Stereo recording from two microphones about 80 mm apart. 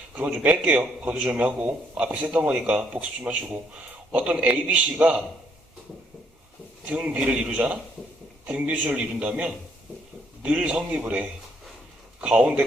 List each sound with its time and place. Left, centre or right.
0.2 s a man's voice: centre
6.8 s a man's voice: centre